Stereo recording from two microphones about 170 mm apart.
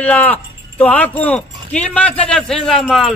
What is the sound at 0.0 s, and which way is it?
Speech, 10° left (ahead or behind).